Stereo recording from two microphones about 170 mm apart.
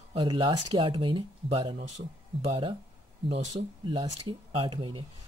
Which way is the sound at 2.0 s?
60° right (ahead or behind).